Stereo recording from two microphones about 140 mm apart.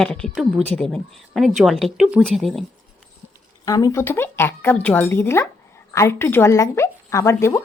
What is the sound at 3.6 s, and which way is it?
Speech, 25° left (ahead or behind).